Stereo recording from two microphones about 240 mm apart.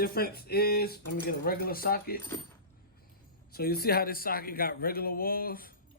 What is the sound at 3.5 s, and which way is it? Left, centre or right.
Speech, left.